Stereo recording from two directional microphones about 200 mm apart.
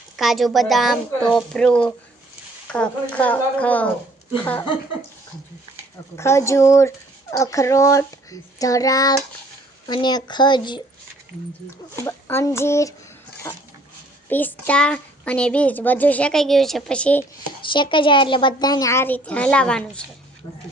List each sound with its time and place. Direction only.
0.2 s speech: centre (ahead or behind)
6.1 s a child's voice: 15° left (ahead or behind)
12.0 s a child's voice: 10° left (ahead or behind)
17.7 s a child's voice: 25° left (ahead or behind); by 19.8 s 5° left (ahead or behind)